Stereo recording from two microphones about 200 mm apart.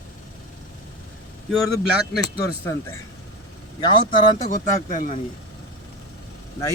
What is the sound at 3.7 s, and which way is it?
Speech, 25° left (ahead or behind).